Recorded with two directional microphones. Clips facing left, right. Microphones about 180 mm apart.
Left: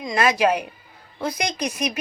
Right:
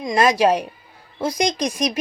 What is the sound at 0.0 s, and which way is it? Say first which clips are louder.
A woman's voice: right 3 dB; 35° right (ahead or behind).